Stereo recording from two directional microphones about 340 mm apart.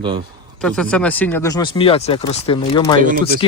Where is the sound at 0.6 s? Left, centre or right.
Centre.